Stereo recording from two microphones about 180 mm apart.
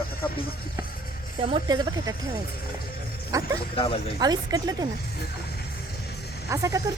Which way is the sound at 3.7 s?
30° left (ahead or behind).